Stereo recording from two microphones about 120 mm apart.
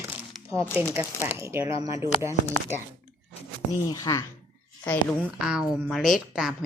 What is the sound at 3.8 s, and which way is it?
Speech, 30° left (ahead or behind).